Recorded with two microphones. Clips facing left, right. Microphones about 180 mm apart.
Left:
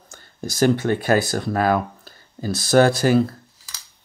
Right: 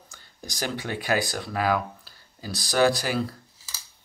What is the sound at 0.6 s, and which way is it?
Speech, 45° left (ahead or behind).